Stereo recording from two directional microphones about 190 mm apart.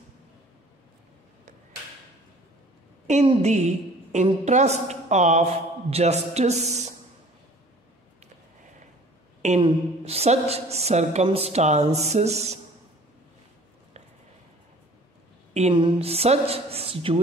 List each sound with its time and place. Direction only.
3.1 s a woman's voice: 35° right (ahead or behind)
9.6 s a woman's voice: 30° right (ahead or behind)
15.5 s a woman's voice: 35° right (ahead or behind)